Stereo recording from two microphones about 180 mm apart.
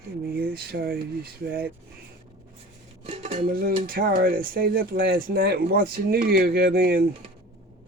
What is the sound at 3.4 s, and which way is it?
Speech, 55° right (ahead or behind).